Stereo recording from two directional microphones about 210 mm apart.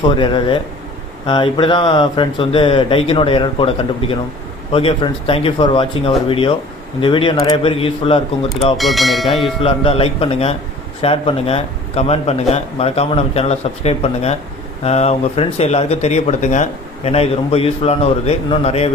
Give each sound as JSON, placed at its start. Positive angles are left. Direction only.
{"t": 0.2, "sound": "speech", "side_deg": 25}
{"t": 8.8, "sound": "speech", "side_deg": 0}
{"t": 9.3, "sound": "speech", "side_deg": 25}